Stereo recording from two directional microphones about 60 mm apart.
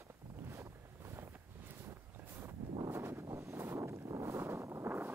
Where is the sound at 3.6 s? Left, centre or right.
Right.